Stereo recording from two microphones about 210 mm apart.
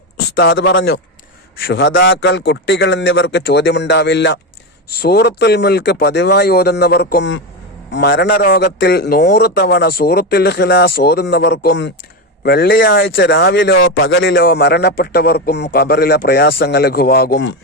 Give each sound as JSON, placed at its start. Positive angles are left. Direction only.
{"t": 0.3, "sound": "a man's voice", "side_deg": 55}